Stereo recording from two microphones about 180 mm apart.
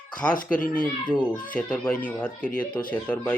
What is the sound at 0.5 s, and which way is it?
Speech, 50° left (ahead or behind).